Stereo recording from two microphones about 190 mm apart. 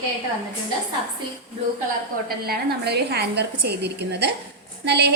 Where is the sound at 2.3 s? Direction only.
55° right (ahead or behind).